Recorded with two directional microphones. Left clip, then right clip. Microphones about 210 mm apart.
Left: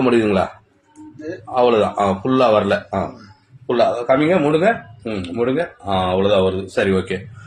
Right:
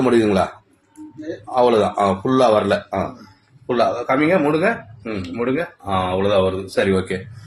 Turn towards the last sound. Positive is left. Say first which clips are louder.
# even
turn(degrees=0)  # may be behind; listen again after turning